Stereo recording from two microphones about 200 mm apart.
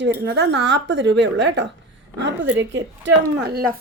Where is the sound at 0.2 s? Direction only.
60° right (ahead or behind).